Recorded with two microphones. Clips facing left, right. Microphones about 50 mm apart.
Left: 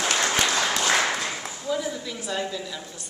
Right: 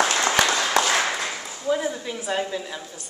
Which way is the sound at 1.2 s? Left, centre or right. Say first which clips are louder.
Right 3 dB; right.